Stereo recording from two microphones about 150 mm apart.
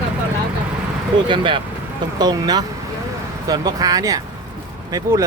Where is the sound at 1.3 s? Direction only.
35° right (ahead or behind).